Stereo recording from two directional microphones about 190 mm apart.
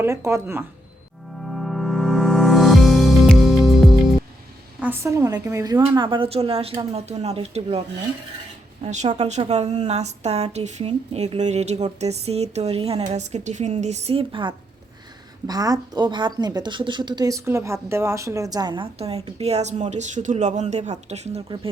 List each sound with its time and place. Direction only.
0.0 s speech: 15° right (ahead or behind)
1.4 s music: centre (ahead or behind)
4.8 s a woman's voice: 15° right (ahead or behind); by 7.8 s 35° right (ahead or behind)
8.8 s a woman's voice: 35° right (ahead or behind)